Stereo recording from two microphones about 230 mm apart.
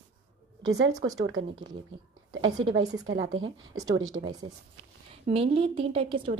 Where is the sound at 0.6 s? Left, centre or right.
Centre.